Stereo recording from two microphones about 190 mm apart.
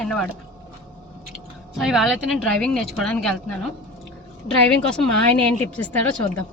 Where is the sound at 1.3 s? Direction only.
Centre (ahead or behind).